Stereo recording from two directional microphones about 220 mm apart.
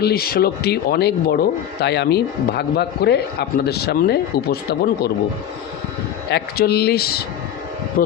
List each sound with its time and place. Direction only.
0.0 s a man's voice: 45° left (ahead or behind)
6.3 s a man's voice: 45° left (ahead or behind)